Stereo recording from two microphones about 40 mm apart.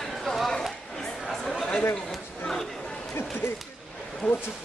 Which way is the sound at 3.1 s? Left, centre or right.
Left.